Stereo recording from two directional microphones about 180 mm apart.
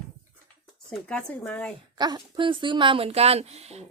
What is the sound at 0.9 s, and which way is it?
Speech, 5° left (ahead or behind).